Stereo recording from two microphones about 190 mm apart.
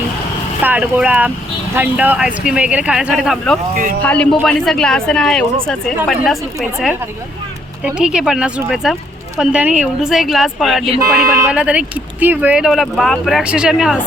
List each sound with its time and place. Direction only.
0.6 s speech: 10° right (ahead or behind)
7.9 s speech: 5° right (ahead or behind)
11.0 s speech: 15° right (ahead or behind)